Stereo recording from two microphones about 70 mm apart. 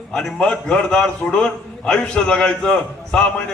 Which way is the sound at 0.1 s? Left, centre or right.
Centre.